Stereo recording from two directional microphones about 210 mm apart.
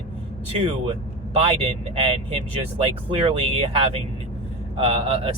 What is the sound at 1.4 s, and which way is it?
Speech, 25° right (ahead or behind).